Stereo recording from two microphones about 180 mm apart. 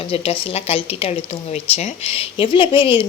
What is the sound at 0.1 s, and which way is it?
Speech, 30° left (ahead or behind).